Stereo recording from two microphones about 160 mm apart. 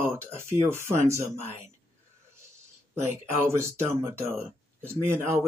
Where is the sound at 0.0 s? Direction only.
15° right (ahead or behind).